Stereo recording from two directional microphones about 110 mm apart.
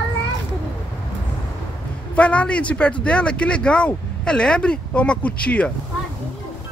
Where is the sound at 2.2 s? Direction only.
10° left (ahead or behind).